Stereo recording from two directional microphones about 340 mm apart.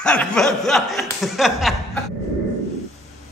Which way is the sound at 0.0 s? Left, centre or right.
Centre.